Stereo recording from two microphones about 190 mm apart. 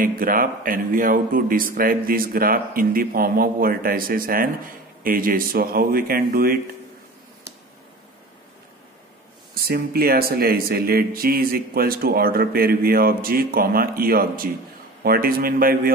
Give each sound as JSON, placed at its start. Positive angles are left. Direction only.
{"t": 0.0, "sound": "speech", "side_deg": -50}
{"t": 9.5, "sound": "speech", "side_deg": -50}